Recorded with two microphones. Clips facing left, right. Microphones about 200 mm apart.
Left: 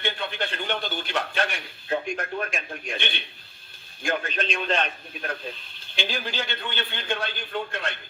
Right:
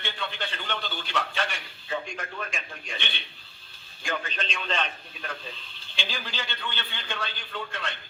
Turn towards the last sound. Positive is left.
turn(degrees=50)  # may be behind; listen again after turning